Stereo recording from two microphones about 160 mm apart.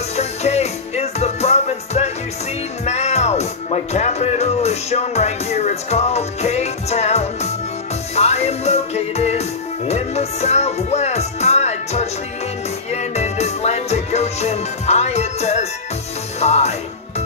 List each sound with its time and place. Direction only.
0.1 s music: 45° left (ahead or behind)